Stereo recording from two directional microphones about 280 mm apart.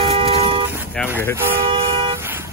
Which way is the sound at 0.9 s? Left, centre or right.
Centre.